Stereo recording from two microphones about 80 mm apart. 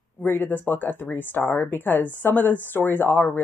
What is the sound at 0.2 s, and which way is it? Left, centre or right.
Speech, left.